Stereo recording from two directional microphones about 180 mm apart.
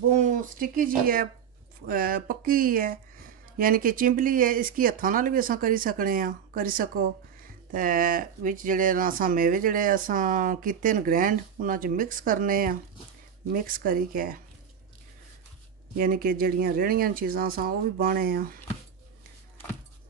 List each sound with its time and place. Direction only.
0.1 s a sound: 45° right (ahead or behind)
1.9 s speech: 55° right (ahead or behind)
16.0 s speech: 55° right (ahead or behind)